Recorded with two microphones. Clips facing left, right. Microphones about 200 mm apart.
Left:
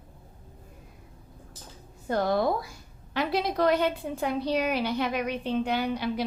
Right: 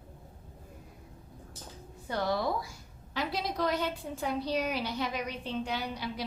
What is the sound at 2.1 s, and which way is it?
A woman's voice, 50° left (ahead or behind).